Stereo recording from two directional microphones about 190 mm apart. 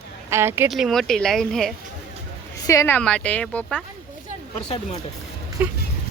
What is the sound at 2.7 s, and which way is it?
Speech, 15° left (ahead or behind).